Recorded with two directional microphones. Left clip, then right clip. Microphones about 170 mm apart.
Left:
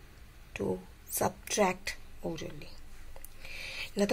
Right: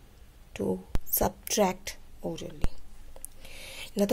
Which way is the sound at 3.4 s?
20° right (ahead or behind).